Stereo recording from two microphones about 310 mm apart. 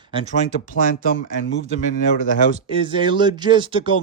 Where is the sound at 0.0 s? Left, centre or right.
Centre.